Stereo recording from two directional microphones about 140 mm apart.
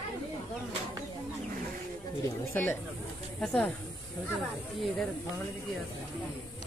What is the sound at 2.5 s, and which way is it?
Speech, 15° left (ahead or behind).